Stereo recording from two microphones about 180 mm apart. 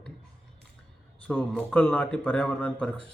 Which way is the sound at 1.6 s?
10° left (ahead or behind).